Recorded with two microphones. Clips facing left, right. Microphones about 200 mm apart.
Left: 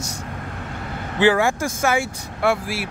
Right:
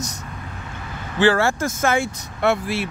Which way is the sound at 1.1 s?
15° left (ahead or behind).